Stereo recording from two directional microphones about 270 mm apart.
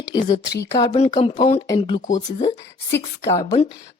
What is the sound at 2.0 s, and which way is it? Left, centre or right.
Speech, left.